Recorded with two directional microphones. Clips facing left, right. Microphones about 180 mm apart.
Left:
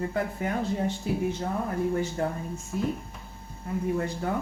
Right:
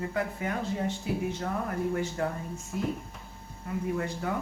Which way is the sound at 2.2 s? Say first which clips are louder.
Left 2 dB; 35° left (ahead or behind).